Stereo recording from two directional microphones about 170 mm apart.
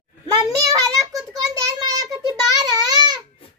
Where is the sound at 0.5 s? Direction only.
20° right (ahead or behind).